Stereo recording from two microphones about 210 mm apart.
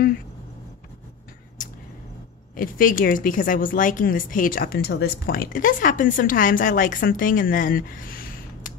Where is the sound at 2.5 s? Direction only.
40° left (ahead or behind).